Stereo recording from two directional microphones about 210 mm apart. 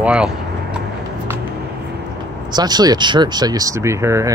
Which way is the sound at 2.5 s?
20° right (ahead or behind).